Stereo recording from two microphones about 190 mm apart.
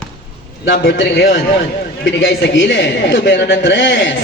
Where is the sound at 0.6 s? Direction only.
55° left (ahead or behind).